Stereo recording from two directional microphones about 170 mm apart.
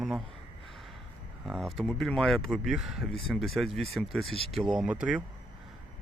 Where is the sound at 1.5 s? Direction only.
Centre (ahead or behind).